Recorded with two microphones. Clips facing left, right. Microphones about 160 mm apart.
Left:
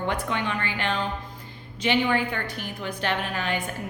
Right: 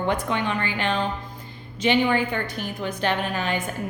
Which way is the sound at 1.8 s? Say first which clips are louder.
Right 3 dB; 20° right (ahead or behind).